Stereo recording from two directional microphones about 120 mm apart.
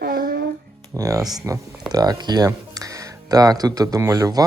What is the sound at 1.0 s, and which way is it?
Speech, 30° right (ahead or behind).